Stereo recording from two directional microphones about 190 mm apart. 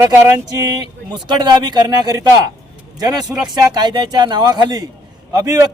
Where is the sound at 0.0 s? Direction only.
15° right (ahead or behind).